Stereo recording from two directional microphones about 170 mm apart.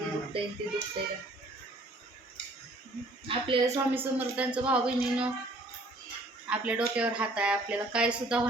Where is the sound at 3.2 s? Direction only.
30° right (ahead or behind).